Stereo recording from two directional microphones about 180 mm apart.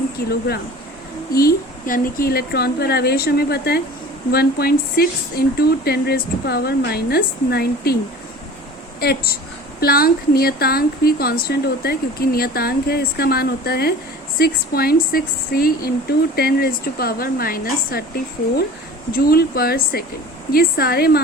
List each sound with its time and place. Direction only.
0.3 s speech: 60° left (ahead or behind)
9.0 s a woman's voice: 60° left (ahead or behind)